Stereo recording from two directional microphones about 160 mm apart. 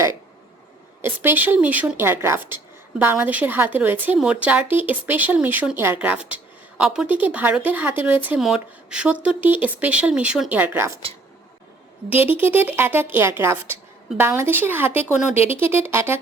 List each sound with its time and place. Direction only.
1.0 s speech: 15° right (ahead or behind)
12.0 s speech: 10° right (ahead or behind)
15.2 s speech: 50° left (ahead or behind)
15.6 s speech: 15° right (ahead or behind)